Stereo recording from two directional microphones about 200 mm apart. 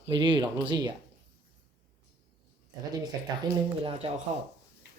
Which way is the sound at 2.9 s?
20° right (ahead or behind).